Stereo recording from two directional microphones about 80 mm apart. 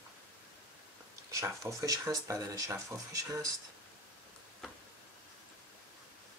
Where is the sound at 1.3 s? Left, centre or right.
Right.